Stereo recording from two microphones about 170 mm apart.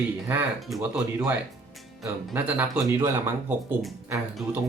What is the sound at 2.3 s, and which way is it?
Speech, 10° right (ahead or behind).